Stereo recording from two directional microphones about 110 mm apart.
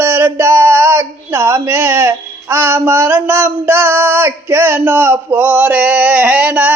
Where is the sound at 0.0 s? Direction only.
20° right (ahead or behind).